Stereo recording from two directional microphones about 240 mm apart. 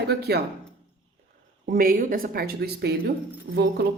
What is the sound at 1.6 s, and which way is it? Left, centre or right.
Speech, right.